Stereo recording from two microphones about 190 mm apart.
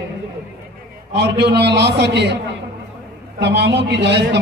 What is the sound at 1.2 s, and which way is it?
A man's voice, 60° right (ahead or behind).